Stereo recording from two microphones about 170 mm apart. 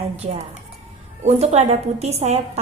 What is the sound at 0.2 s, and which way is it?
A woman's voice, 40° right (ahead or behind).